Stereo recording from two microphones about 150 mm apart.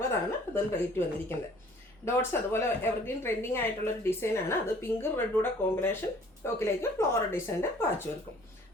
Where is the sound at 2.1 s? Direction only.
15° left (ahead or behind).